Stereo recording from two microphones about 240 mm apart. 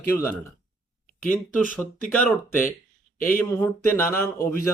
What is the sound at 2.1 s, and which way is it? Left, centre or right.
Speech, centre.